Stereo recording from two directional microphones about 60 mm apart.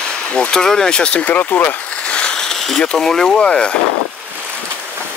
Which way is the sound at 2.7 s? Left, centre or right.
Centre.